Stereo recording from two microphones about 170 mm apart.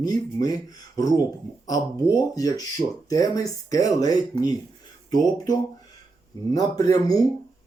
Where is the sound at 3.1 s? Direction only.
20° left (ahead or behind).